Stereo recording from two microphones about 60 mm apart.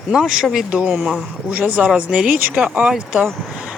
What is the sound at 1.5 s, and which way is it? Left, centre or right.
Speech, right.